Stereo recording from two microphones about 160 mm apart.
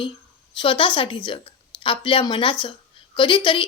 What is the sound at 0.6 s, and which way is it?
A woman's voice, 30° left (ahead or behind).